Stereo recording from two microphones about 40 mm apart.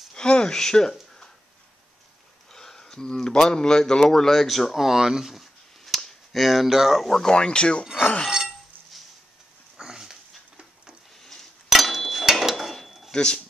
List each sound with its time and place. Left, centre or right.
0.1 s a sound: left
2.5 s speech: centre
7.1 s speech: centre
7.3 s speech: left
8.3 s a sound: centre
9.8 s dog: centre
11.1 s a sound: centre
12.8 s cutlery: centre
13.1 s speech: left